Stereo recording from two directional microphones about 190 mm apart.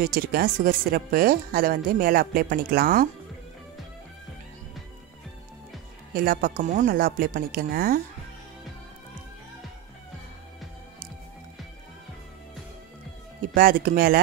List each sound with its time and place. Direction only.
0.0 s speech: 50° right (ahead or behind)
6.1 s speech: 50° right (ahead or behind)
13.6 s speech: 50° right (ahead or behind)